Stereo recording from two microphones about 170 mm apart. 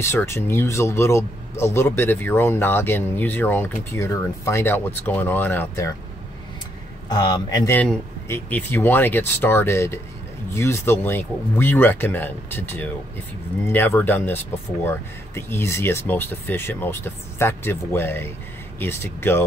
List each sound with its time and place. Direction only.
0.0 s speech: 15° left (ahead or behind)
7.1 s speech: 25° left (ahead or behind)
7.7 s speech: 10° left (ahead or behind)